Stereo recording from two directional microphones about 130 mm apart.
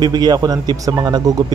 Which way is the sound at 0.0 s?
30° right (ahead or behind).